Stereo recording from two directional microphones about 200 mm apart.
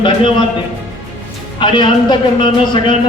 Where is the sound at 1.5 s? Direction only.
25° left (ahead or behind).